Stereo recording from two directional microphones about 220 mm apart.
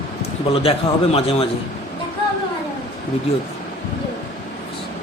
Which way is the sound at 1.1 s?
25° left (ahead or behind).